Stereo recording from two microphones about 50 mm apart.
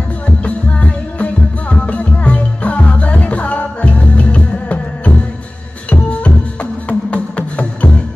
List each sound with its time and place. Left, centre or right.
0.4 s music: left